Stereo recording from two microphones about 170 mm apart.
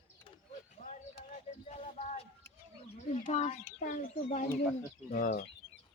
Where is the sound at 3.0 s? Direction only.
45° left (ahead or behind).